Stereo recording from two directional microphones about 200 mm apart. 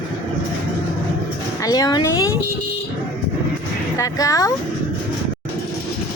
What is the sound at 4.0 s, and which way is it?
Speech, 15° left (ahead or behind).